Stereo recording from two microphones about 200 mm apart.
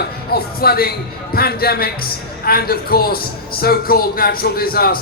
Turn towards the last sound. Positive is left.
turn(degrees=50)  # may be behind; listen again after turning